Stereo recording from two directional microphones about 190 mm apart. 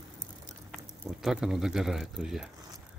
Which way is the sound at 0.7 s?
Centre (ahead or behind).